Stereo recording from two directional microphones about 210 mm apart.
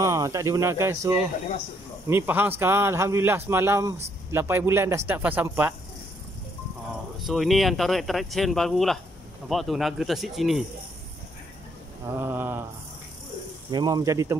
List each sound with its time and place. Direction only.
0.0 s a man's voice: 15° right (ahead or behind)
7.2 s speech: centre (ahead or behind)
12.2 s a man's voice: 10° right (ahead or behind)
13.7 s speech: 20° right (ahead or behind)